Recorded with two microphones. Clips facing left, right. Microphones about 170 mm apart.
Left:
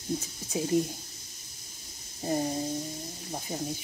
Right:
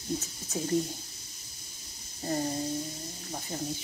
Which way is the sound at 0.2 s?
10° left (ahead or behind).